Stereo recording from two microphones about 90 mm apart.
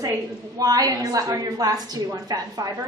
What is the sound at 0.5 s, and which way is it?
A woman's voice, 40° right (ahead or behind).